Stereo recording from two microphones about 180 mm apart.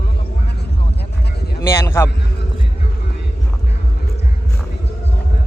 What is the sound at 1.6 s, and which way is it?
Speech, 15° left (ahead or behind).